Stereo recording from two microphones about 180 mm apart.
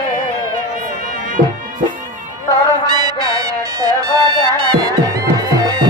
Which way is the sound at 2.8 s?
20° right (ahead or behind).